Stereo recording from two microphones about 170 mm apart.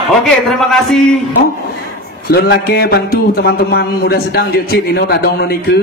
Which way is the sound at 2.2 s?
65° left (ahead or behind).